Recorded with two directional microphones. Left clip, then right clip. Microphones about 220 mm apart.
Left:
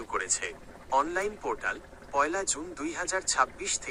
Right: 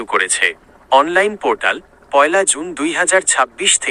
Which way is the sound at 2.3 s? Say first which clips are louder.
Right 17 dB; 70° right (ahead or behind).